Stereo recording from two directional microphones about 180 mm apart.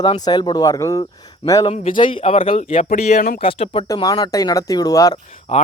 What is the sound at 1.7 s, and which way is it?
Speech, 35° left (ahead or behind).